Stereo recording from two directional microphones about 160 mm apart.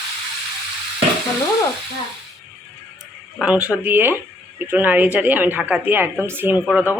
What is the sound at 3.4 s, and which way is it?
A woman's voice, 5° right (ahead or behind).